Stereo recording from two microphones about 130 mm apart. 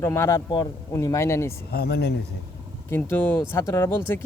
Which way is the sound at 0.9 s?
20° left (ahead or behind).